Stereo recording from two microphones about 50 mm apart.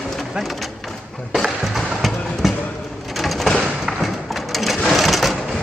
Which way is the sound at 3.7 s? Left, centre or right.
Centre.